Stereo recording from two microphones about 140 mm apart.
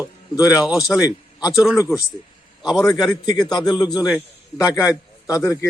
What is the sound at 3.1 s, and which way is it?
Speech, 30° left (ahead or behind).